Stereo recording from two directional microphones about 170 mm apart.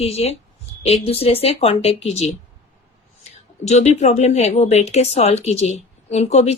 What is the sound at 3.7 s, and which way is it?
Speech, 40° left (ahead or behind).